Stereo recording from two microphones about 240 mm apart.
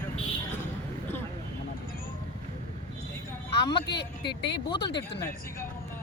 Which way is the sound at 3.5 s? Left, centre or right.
Left.